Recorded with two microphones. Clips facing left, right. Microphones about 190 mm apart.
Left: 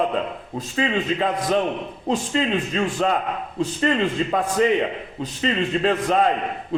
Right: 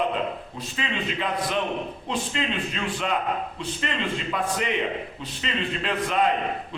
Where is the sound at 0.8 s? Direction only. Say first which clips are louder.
Left 7 dB; 40° left (ahead or behind).